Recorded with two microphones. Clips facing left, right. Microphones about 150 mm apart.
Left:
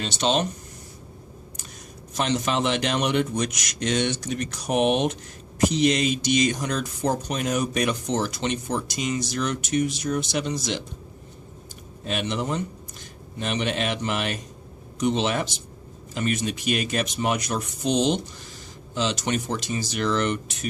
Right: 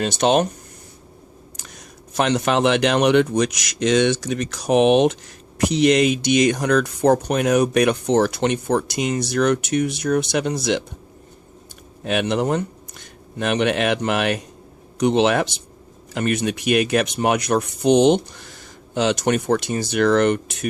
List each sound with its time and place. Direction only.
0.0 s speech: 55° right (ahead or behind)
2.1 s a man's voice: 65° right (ahead or behind); by 5.1 s 90° right
5.5 s speech: 70° right (ahead or behind)
12.0 s speech: 65° right (ahead or behind)